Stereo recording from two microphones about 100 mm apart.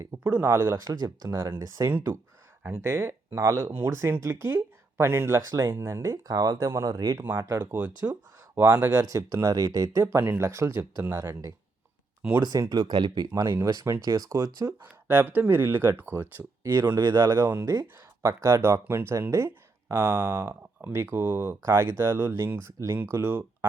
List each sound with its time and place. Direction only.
0.3 s speech: 20° right (ahead or behind)
1.4 s speech: 45° right (ahead or behind)
2.6 s speech: 25° right (ahead or behind)
7.3 s speech: 30° right (ahead or behind); by 13.5 s 45° right (ahead or behind)
13.7 s speech: 30° right (ahead or behind)
15.0 s speech: 20° right (ahead or behind)
16.8 s speech: 45° right (ahead or behind)
17.3 s speech: 25° right (ahead or behind)
23.1 s speech: 20° right (ahead or behind)